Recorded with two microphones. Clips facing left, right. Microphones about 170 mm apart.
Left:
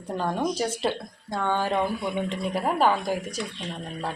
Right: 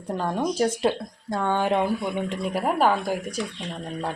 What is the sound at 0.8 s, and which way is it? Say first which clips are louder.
Speech: right 4 dB; 5° right (ahead or behind).